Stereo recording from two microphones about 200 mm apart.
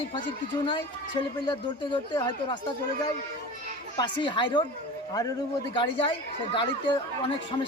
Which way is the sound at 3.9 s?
25° left (ahead or behind).